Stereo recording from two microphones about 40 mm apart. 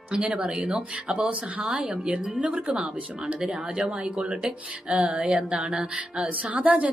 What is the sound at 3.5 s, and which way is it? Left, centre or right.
Speech, centre.